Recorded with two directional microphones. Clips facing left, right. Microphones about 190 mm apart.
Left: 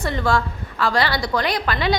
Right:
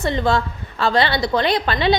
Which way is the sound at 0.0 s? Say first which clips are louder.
Right 2 dB; 20° right (ahead or behind).